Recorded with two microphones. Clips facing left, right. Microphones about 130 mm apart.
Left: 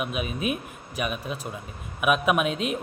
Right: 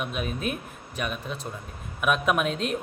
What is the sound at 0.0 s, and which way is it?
A man's voice, 5° left (ahead or behind).